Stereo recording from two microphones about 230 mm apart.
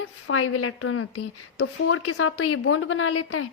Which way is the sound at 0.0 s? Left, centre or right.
Left.